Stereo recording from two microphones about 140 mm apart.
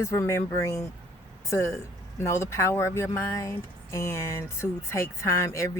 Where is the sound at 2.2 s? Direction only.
20° left (ahead or behind).